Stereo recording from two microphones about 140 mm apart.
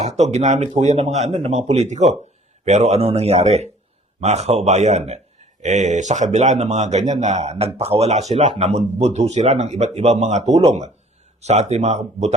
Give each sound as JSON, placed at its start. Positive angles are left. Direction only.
{"t": 0.0, "sound": "a man's voice", "side_deg": -55}